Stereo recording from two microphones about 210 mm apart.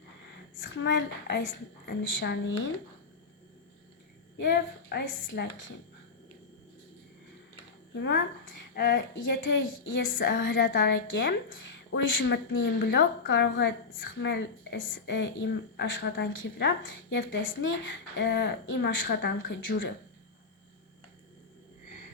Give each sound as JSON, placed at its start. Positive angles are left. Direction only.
{"t": 0.8, "sound": "a woman's voice", "side_deg": 60}
{"t": 4.4, "sound": "a woman's voice", "side_deg": 55}
{"t": 7.9, "sound": "a woman's voice", "side_deg": 60}